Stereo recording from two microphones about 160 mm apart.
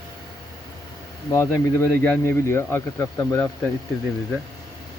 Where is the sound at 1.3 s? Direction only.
20° left (ahead or behind).